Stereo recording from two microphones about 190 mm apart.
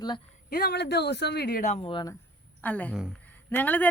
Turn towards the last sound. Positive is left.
turn(degrees=10)  # may be behind; listen again after turning